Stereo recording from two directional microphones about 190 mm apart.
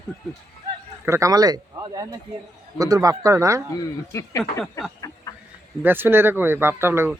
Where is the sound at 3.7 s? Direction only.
15° left (ahead or behind).